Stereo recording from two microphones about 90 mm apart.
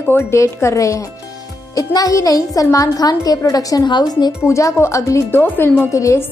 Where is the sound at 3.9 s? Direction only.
55° left (ahead or behind).